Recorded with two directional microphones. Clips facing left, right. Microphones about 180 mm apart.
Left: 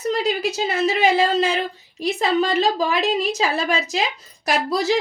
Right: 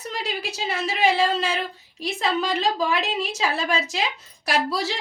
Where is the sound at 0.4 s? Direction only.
40° left (ahead or behind).